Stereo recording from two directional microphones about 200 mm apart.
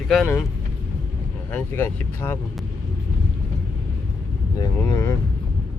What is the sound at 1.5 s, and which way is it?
Speech, 10° left (ahead or behind).